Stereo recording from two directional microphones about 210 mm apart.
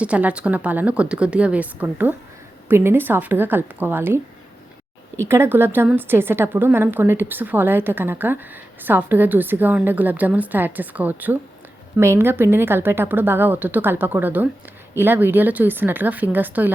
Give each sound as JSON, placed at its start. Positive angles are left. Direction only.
{"t": 0.0, "sound": "a woman's voice", "side_deg": -5}